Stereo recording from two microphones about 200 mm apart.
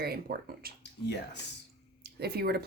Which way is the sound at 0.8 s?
55° left (ahead or behind).